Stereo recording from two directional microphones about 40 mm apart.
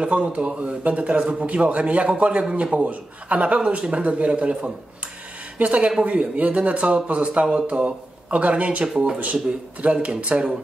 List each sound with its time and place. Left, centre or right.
0.0 s speech: right
3.5 s speech: right
8.8 s speech: centre
9.2 s speech: right